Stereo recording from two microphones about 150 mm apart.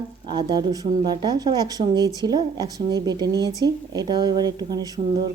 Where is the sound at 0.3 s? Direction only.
30° right (ahead or behind).